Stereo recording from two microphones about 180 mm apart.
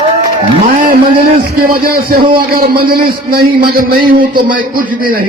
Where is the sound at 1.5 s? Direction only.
55° right (ahead or behind).